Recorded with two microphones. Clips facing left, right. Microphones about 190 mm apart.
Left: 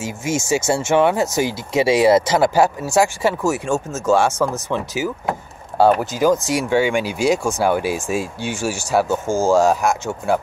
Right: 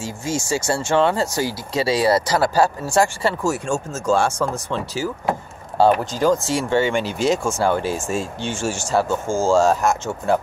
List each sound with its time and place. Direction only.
0.0 s speech: 20° left (ahead or behind)
3.7 s speech: 5° left (ahead or behind)
4.6 s speech: 15° left (ahead or behind)